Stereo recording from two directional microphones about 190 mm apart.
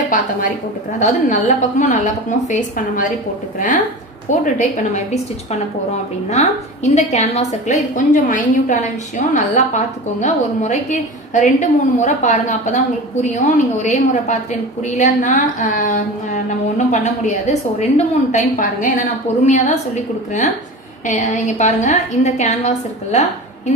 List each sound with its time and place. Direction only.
0.9 s a woman's voice: 40° left (ahead or behind)